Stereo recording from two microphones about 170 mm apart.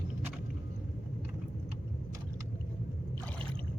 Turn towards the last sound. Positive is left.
turn(degrees=10)  # may be behind; listen again after turning